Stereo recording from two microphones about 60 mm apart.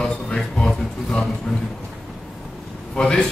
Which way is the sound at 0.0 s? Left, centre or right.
Centre.